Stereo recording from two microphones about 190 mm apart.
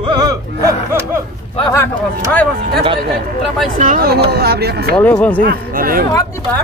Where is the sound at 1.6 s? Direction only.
15° left (ahead or behind).